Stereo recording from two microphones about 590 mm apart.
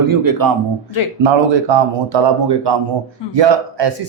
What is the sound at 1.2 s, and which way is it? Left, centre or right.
Speech, right.